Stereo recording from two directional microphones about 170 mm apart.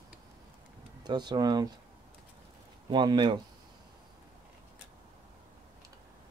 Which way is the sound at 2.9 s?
25° right (ahead or behind).